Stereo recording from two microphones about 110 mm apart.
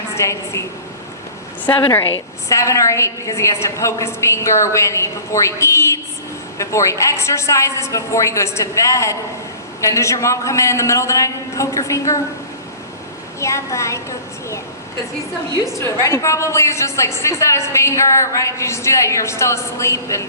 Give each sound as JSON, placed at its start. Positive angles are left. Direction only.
{"t": 0.1, "sound": "a woman's voice", "side_deg": 25}
{"t": 2.5, "sound": "a woman's voice", "side_deg": 25}
{"t": 13.4, "sound": "a woman's voice", "side_deg": 25}
{"t": 15.8, "sound": "a woman's voice", "side_deg": 30}